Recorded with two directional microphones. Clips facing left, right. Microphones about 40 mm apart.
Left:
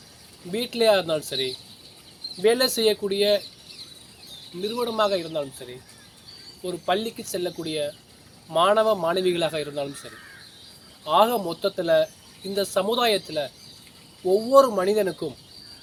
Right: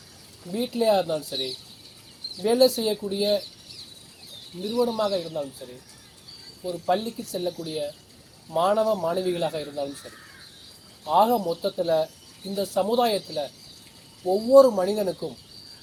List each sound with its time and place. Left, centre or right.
0.5 s speech: left
4.7 s speech: left
4.9 s speech: left
11.0 s speech: left
12.5 s speech: left
12.9 s speech: left
14.5 s speech: left
14.8 s speech: left